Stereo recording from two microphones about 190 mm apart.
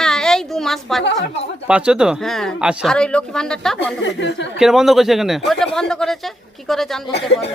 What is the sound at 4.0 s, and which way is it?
Speech, 70° left (ahead or behind).